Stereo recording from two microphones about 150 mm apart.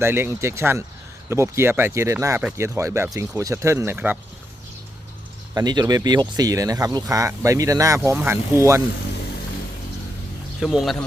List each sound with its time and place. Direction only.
0.0 s speech: 15° right (ahead or behind)
5.5 s speech: 25° right (ahead or behind)
10.6 s a man's voice: centre (ahead or behind)